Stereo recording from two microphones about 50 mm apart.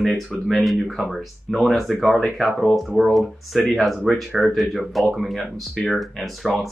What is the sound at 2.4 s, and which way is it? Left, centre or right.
Speech, centre.